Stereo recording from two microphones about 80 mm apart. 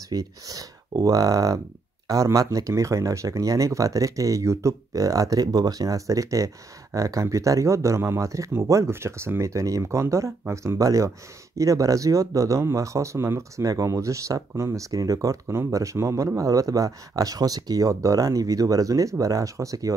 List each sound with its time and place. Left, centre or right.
0.1 s speech: right